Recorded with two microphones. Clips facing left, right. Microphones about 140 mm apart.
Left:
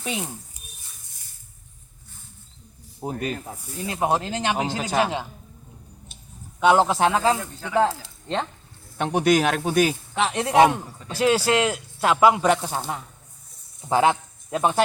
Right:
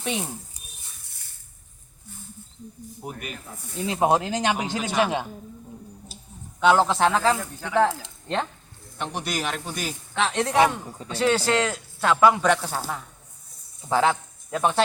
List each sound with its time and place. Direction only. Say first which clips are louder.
0.0 s speech: right 1 dB; 5° left (ahead or behind)
3.0 s speech: left 8 dB; 30° left (ahead or behind)
4.0 s speech: right 2 dB; 15° right (ahead or behind)
4.5 s speech: left 1 dB; 25° left (ahead or behind)
6.6 s speech: left 1 dB; 15° left (ahead or behind)
9.0 s speech: left 10 dB; 55° left (ahead or behind)
10.2 s speech: left 3 dB; 15° left (ahead or behind)